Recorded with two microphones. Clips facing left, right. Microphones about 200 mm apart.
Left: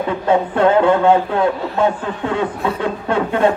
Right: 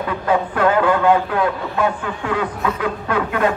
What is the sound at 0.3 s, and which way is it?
A man's voice, 25° left (ahead or behind).